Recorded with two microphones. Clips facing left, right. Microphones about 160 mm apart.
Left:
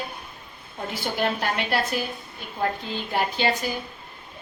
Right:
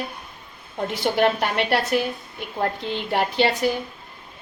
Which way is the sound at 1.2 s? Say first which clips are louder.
Right 4 dB; 65° right (ahead or behind).